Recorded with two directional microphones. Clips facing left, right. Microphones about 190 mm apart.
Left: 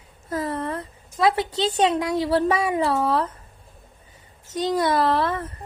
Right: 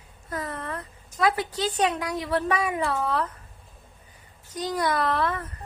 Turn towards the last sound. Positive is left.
turn(degrees=30)  # may be behind; listen again after turning